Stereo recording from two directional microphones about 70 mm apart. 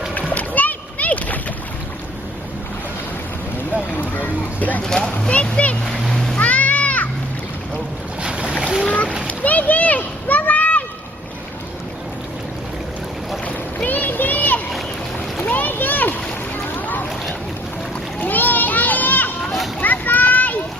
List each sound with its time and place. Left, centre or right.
0.1 s splash: left
4.1 s a sound: left
4.8 s speech: centre
5.8 s splash: centre
6.4 s music: left
8.2 s boat: centre
8.8 s boat: centre
9.2 s a sound: left
13.4 s boat: left
15.4 s splash: left
16.7 s boat: left
18.2 s children playing: left
19.8 s a sound: left